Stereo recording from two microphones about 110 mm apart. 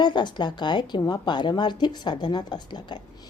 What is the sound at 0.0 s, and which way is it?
A woman's voice, 45° left (ahead or behind).